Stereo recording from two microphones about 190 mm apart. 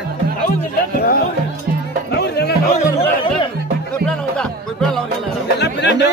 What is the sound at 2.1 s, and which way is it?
Music, 60° left (ahead or behind).